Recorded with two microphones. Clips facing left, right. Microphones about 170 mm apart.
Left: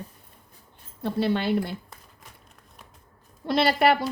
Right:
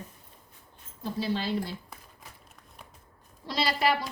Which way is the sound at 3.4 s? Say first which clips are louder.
Left 7 dB; 60° left (ahead or behind).